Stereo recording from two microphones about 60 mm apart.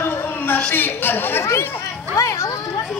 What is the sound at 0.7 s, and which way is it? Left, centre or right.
Speech, left.